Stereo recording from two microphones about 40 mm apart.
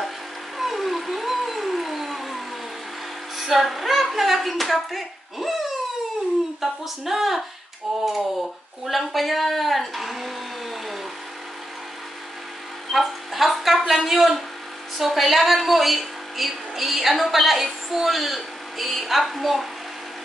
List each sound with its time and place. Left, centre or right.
0.6 s a sound: centre
3.3 s a woman's voice: centre
12.9 s a woman's voice: centre